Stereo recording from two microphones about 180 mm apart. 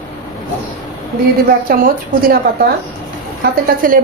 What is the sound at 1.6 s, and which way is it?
Speech, 55° right (ahead or behind).